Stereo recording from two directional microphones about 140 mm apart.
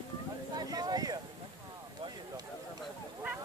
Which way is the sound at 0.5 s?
30° right (ahead or behind).